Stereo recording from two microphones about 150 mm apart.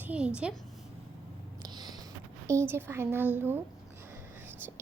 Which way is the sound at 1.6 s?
25° right (ahead or behind).